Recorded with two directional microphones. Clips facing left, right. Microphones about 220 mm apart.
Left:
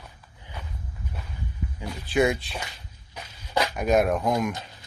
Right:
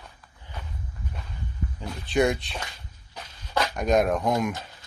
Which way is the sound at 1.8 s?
5° left (ahead or behind).